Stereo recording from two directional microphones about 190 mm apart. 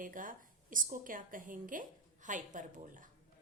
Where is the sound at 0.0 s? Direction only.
45° right (ahead or behind).